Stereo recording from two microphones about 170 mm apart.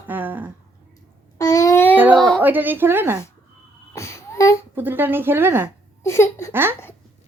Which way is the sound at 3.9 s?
15° left (ahead or behind).